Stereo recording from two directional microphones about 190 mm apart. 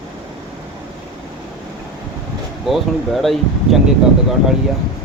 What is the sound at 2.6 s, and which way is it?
Speech, centre (ahead or behind).